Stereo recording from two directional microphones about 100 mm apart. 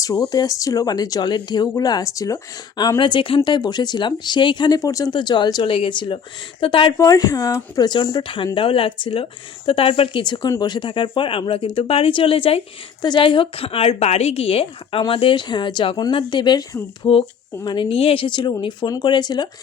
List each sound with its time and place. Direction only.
0.0 s speech: 35° left (ahead or behind)
3.0 s speech: 55° left (ahead or behind); by 5.1 s 35° left (ahead or behind)
5.1 s speech: 50° left (ahead or behind)
5.6 s speech: 60° left (ahead or behind)
6.9 s speech: 35° left (ahead or behind); by 12.6 s 75° left (ahead or behind)
13.0 s a woman's voice: 55° left (ahead or behind)
17.0 s speech: 35° left (ahead or behind)
17.7 s speech: 60° left (ahead or behind)